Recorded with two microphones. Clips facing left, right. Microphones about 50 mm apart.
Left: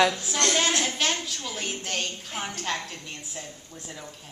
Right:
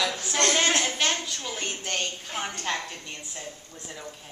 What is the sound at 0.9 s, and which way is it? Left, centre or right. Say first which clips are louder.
A woman's voice: even; centre.